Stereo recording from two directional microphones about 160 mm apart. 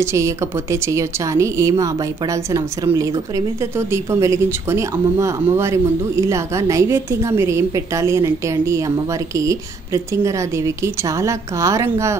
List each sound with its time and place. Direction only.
0.0 s a woman's voice: 15° right (ahead or behind)